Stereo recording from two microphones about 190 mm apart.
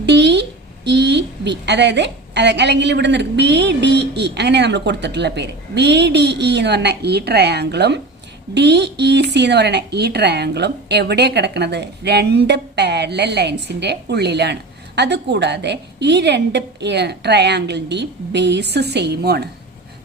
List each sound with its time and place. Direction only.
0.0 s speech: 65° right (ahead or behind)